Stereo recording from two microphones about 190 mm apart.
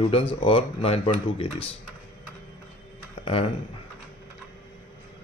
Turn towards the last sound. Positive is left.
turn(degrees=30)  # may be behind; listen again after turning